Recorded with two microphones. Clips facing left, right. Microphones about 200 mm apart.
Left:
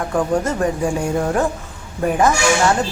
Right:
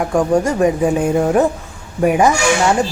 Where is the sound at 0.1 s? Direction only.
10° right (ahead or behind).